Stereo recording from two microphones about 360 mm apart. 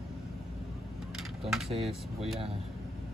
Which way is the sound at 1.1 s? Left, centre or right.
Centre.